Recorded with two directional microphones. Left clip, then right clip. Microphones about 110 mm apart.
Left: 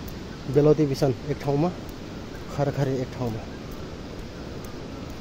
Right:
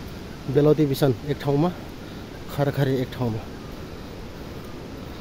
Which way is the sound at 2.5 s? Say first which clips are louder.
Right 2 dB; 55° right (ahead or behind).